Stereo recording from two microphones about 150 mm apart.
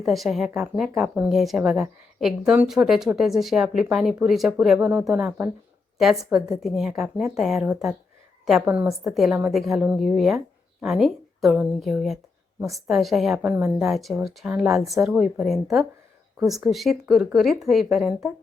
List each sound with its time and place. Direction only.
0.0 s speech: centre (ahead or behind)